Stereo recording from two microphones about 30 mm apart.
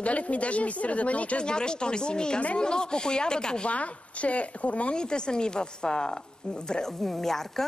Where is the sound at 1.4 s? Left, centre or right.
Left.